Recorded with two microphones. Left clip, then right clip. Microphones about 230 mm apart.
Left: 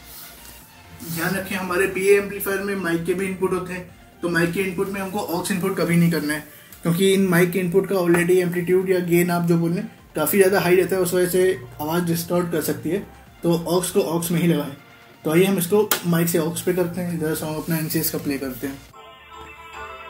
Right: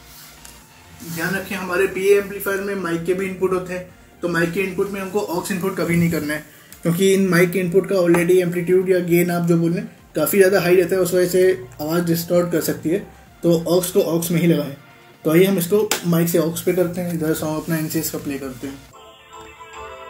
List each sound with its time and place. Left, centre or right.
1.7 s speech: centre
7.0 s speech: right
17.9 s speech: centre